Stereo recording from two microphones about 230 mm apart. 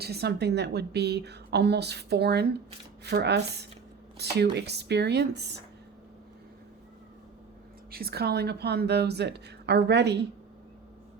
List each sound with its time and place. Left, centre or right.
0.0 s a woman's voice: right
7.9 s a woman's voice: right